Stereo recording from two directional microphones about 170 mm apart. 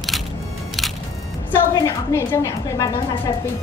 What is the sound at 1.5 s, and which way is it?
A woman's voice, 20° left (ahead or behind).